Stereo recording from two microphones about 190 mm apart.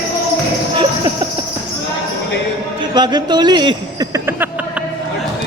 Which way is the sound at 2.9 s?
20° right (ahead or behind).